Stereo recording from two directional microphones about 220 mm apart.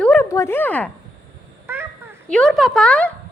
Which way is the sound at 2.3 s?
5° left (ahead or behind).